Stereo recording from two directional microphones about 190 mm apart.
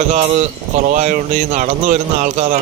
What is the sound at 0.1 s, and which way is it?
Speech, 35° right (ahead or behind).